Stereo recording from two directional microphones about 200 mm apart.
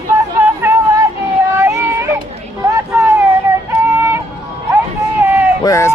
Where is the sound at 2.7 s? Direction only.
10° right (ahead or behind).